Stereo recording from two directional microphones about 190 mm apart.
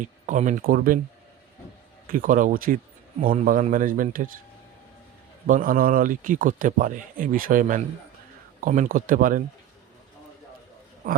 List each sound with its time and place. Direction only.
0.0 s speech: 40° right (ahead or behind)
2.1 s speech: 45° right (ahead or behind)
5.5 s speech: 45° right (ahead or behind)
11.0 s a man's voice: 50° right (ahead or behind)